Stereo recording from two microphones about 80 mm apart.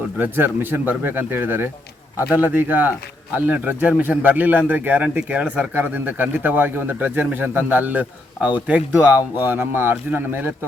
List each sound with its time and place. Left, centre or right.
0.2 s a man's voice: right